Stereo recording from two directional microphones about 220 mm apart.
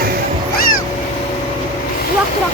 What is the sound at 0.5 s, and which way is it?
Vehicle, 40° left (ahead or behind).